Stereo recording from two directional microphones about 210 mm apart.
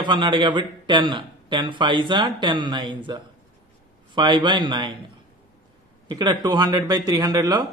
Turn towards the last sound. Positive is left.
turn(degrees=-20)  # may be behind; listen again after turning